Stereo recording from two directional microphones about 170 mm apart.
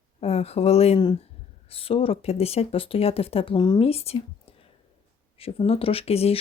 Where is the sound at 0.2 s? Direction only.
35° left (ahead or behind).